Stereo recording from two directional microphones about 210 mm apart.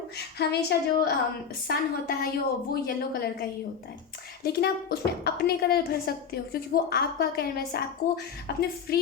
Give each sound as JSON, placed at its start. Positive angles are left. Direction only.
{"t": 0.2, "sound": "speech", "side_deg": 50}